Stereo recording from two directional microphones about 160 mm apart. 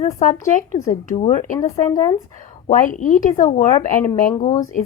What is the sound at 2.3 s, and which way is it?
Speech, 50° left (ahead or behind).